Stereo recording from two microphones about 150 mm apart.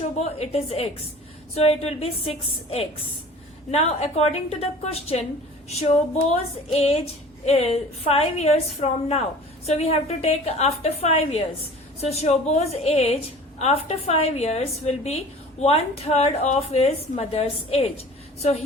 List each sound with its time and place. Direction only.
0.0 s a woman's voice: 45° left (ahead or behind)
6.7 s a woman's voice: 40° left (ahead or behind)